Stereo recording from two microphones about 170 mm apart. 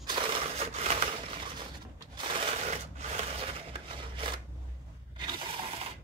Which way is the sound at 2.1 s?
30° right (ahead or behind).